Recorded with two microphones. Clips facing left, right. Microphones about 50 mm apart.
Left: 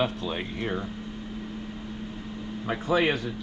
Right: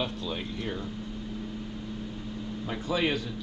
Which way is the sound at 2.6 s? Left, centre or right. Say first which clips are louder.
Left 5 dB; left.